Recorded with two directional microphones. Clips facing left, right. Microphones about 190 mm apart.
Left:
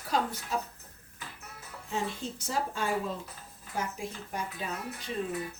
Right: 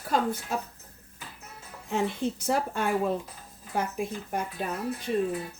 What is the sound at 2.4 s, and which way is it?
Speech, 60° right (ahead or behind).